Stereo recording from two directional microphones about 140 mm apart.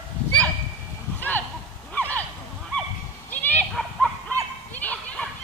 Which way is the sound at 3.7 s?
Centre (ahead or behind).